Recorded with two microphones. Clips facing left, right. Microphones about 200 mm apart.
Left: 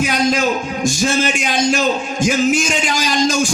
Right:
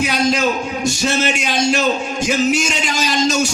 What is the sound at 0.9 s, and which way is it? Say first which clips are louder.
Speech: left 2 dB; 45° left (ahead or behind).